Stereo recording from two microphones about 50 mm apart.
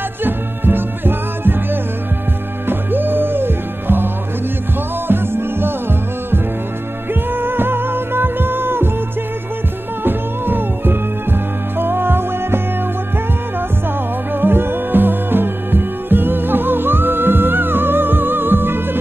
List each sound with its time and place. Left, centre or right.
0.2 s music: right
10.0 s music: right
14.3 s music: right